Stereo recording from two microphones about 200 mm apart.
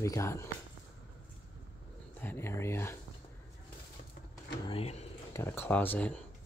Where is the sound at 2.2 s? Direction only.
10° left (ahead or behind).